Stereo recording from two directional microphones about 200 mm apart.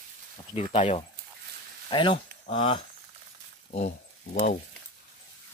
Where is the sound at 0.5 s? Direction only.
30° left (ahead or behind).